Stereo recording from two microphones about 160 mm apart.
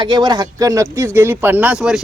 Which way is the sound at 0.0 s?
25° right (ahead or behind).